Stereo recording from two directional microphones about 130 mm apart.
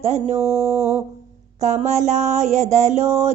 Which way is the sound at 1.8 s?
60° right (ahead or behind).